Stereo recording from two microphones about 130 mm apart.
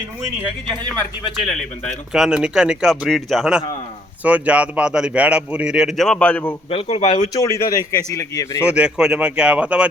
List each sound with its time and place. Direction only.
1.5 s speech: 5° left (ahead or behind)
6.1 s a man's voice: 10° left (ahead or behind)
6.7 s speech: 50° left (ahead or behind)
7.3 s a man's voice: 25° left (ahead or behind)
8.7 s speech: 5° right (ahead or behind)